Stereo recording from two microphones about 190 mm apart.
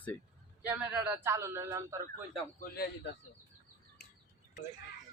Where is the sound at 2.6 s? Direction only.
55° left (ahead or behind).